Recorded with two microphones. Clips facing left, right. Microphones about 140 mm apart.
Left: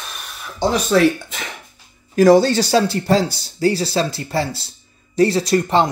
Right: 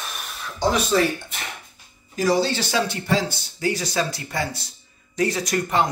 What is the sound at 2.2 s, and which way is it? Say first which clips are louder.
Speech: left 9 dB; 50° left (ahead or behind).